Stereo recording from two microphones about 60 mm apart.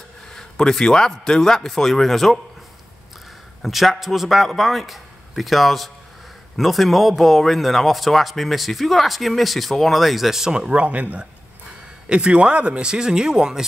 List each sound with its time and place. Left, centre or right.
0.3 s a man's voice: centre
3.6 s speech: centre